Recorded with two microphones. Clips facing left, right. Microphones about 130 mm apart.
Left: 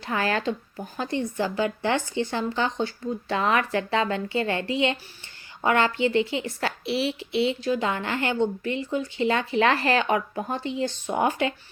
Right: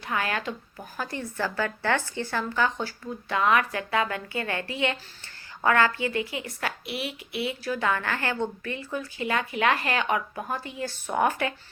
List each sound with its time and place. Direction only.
0.0 s a woman's voice: 30° left (ahead or behind)